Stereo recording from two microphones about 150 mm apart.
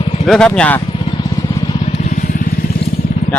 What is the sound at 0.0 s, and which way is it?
Vehicle, 45° left (ahead or behind).